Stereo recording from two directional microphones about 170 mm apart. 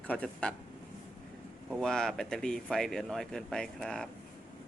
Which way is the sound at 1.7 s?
Centre (ahead or behind).